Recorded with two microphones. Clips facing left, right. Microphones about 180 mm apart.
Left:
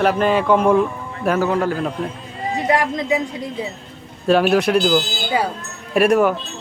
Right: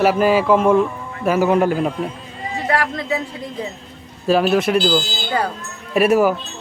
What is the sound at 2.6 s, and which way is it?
Speech, 20° left (ahead or behind).